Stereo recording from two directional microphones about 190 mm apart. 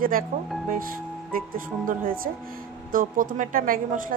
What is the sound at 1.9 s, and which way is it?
A woman's voice, 50° right (ahead or behind).